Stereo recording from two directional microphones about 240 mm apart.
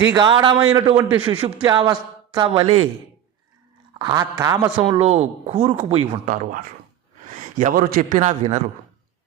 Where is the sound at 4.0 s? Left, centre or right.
Centre.